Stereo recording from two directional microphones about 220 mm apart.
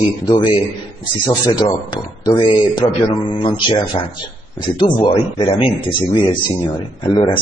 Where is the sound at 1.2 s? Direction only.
20° left (ahead or behind).